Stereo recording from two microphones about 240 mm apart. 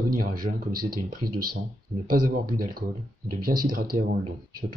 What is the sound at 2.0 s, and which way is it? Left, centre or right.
Speech, right.